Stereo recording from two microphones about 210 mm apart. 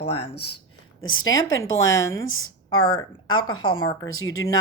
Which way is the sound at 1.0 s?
70° left (ahead or behind).